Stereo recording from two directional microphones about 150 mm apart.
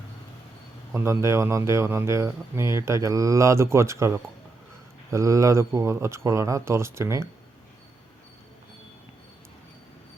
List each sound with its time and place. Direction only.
0.9 s speech: 20° right (ahead or behind)